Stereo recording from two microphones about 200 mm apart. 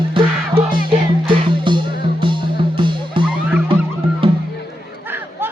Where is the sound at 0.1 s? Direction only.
25° right (ahead or behind).